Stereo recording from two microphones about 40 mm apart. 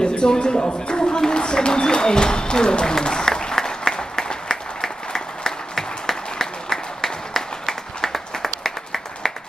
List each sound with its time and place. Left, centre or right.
0.0 s speech: left
3.9 s applause: centre